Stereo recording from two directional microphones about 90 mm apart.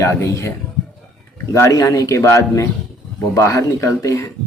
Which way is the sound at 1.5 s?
35° left (ahead or behind).